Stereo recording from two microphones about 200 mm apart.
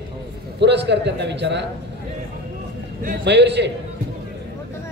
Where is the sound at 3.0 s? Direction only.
60° right (ahead or behind).